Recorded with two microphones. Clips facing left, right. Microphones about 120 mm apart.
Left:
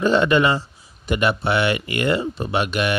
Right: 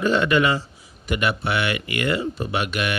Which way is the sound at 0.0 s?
25° left (ahead or behind).